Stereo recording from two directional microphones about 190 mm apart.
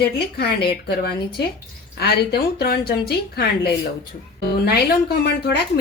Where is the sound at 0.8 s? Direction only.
55° left (ahead or behind).